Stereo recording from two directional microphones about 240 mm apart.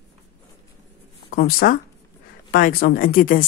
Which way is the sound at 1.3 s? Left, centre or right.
Left.